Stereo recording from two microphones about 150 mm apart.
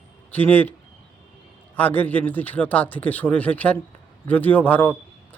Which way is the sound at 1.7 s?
10° left (ahead or behind).